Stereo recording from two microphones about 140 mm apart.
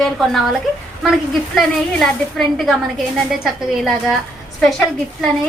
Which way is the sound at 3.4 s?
Centre (ahead or behind).